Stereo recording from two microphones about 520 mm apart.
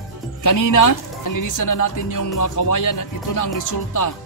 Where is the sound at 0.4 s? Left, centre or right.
Left.